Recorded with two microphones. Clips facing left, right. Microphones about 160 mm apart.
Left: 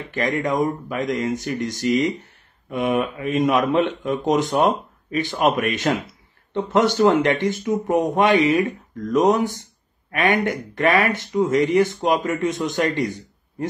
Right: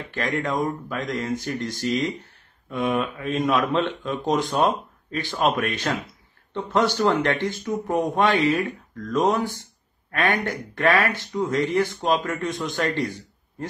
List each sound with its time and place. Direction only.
0.1 s speech: 15° left (ahead or behind)